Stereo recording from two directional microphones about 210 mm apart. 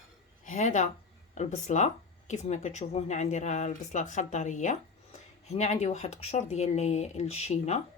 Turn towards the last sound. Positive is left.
turn(degrees=30)  # may be behind; listen again after turning